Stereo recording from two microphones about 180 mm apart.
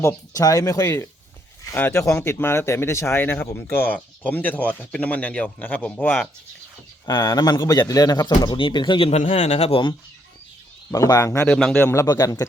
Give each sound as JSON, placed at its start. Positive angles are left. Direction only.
{"t": 0.0, "sound": "speech", "side_deg": 15}
{"t": 7.0, "sound": "speech", "side_deg": 20}
{"t": 10.9, "sound": "speech", "side_deg": 15}